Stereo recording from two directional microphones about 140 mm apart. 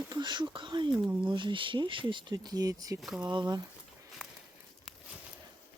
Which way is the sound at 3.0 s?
Centre (ahead or behind).